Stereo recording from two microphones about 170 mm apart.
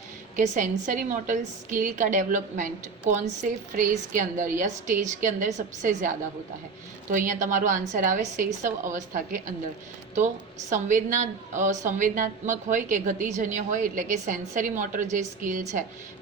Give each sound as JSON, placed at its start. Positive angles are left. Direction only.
{"t": 0.3, "sound": "a woman's voice", "side_deg": -50}